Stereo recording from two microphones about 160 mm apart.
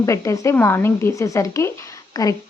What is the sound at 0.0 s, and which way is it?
A woman's voice, 20° left (ahead or behind).